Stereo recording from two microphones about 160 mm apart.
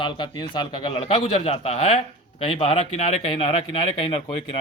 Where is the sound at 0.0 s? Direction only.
30° left (ahead or behind).